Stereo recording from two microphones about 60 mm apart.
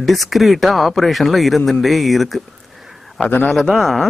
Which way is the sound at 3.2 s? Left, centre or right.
Left.